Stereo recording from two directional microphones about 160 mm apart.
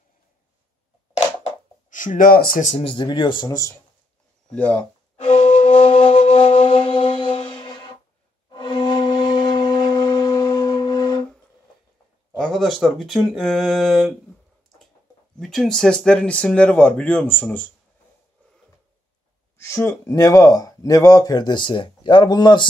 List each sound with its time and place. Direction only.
1.9 s speech: 55° left (ahead or behind)
2.6 s speech: 40° left (ahead or behind); by 3.7 s 25° left (ahead or behind)
4.5 s speech: 10° left (ahead or behind)
5.1 s flute: 40° left (ahead or behind)
7.3 s music: 30° left (ahead or behind)
8.5 s wind instrument: 30° left (ahead or behind)
12.4 s speech: centre (ahead or behind)
15.3 s speech: 5° left (ahead or behind)
19.5 s speech: 15° left (ahead or behind)